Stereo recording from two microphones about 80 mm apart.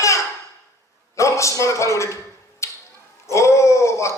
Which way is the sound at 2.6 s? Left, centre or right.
Left.